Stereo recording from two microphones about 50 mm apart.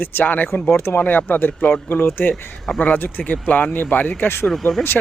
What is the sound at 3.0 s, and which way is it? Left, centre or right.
Speech, left.